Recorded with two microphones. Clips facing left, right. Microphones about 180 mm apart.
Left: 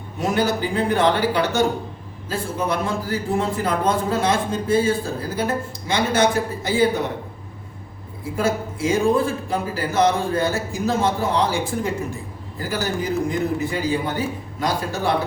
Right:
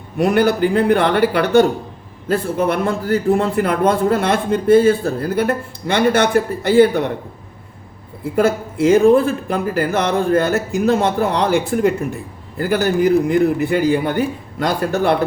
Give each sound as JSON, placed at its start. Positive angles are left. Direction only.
{"t": 0.2, "sound": "a man's voice", "side_deg": -60}
{"t": 8.2, "sound": "a man's voice", "side_deg": -60}